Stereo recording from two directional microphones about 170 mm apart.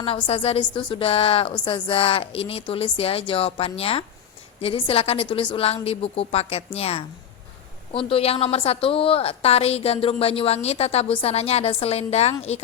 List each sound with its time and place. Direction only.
0.0 s a woman's voice: 35° left (ahead or behind)